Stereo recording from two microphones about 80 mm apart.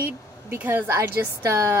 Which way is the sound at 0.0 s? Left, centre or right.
Right.